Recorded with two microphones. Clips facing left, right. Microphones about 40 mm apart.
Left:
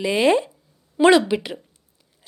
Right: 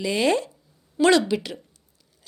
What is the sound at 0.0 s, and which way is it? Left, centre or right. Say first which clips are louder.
A woman's voice: left 4 dB; left.